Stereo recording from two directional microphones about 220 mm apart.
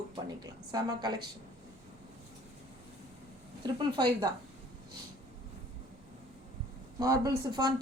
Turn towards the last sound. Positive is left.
turn(degrees=-15)  # may be behind; listen again after turning